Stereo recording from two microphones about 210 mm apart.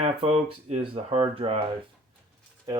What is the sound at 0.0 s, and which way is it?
Speech, 30° right (ahead or behind).